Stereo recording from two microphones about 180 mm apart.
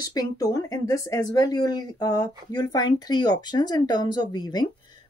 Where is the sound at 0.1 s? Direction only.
20° left (ahead or behind).